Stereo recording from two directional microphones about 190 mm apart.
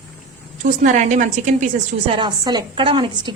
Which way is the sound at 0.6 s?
40° right (ahead or behind).